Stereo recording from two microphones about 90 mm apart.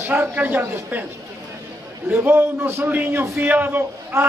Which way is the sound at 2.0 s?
20° right (ahead or behind).